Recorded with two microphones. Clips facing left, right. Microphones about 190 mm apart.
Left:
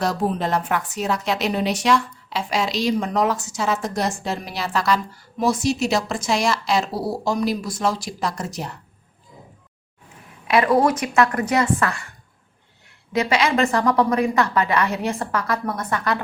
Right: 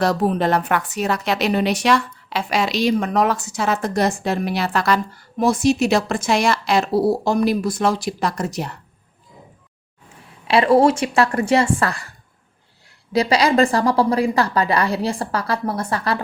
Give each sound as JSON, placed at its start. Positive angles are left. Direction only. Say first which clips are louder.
{"t": 0.0, "sound": "a woman's voice", "louder": "right 4 dB", "side_deg": -65}
{"t": 10.5, "sound": "speech", "louder": "right 3 dB", "side_deg": -30}
{"t": 13.1, "sound": "a woman's voice", "louder": "right 4 dB", "side_deg": -35}